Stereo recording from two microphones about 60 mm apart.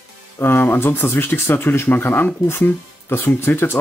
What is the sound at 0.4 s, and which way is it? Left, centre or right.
Speech, left.